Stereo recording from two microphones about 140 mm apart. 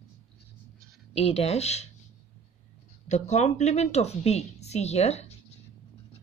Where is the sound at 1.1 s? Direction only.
45° left (ahead or behind).